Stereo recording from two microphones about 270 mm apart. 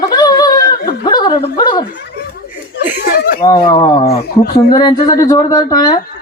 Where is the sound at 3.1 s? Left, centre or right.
Left.